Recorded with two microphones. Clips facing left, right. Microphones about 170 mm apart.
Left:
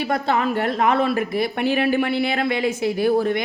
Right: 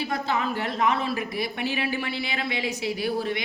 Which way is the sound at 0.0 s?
60° left (ahead or behind).